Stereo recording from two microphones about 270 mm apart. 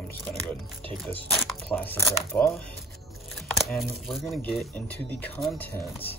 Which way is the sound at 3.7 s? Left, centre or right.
Centre.